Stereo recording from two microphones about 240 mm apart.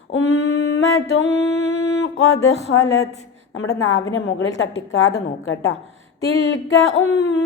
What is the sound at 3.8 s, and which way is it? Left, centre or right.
A woman's voice, left.